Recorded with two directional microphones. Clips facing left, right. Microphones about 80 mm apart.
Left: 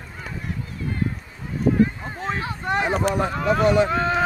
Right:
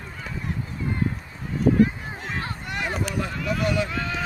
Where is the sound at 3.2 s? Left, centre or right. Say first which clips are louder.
Left 6 dB; left.